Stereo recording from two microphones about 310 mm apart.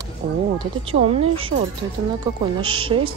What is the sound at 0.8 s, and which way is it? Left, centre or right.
Speech, centre.